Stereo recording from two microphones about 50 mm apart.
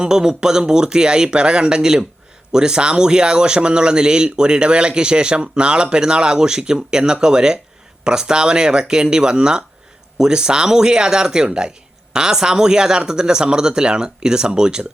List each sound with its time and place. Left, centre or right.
0.0 s a man's voice: centre